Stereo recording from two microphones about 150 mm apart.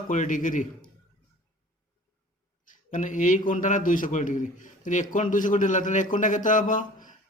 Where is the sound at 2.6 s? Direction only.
60° left (ahead or behind).